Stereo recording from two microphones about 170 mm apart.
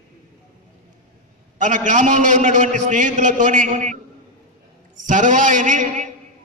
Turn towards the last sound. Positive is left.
turn(degrees=-45)  # may be behind; listen again after turning